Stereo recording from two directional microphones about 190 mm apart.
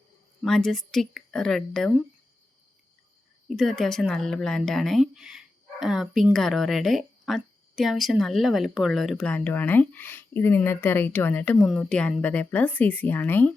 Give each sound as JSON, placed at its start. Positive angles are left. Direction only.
{"t": 0.4, "sound": "speech", "side_deg": 0}
{"t": 3.5, "sound": "speech", "side_deg": 0}